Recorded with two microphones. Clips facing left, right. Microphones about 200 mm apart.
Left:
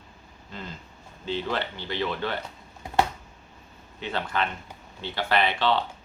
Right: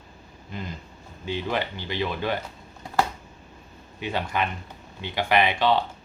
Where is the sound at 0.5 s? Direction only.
15° right (ahead or behind).